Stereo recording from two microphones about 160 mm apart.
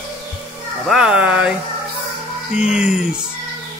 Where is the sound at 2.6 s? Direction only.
5° right (ahead or behind).